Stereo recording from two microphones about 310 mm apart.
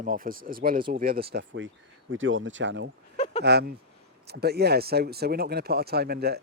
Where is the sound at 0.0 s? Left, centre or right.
Right.